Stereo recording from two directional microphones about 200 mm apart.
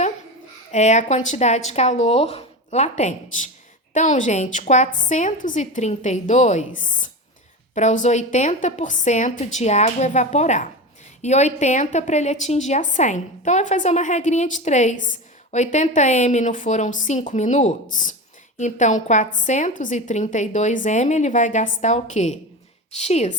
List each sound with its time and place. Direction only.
0.7 s a woman's voice: 35° left (ahead or behind)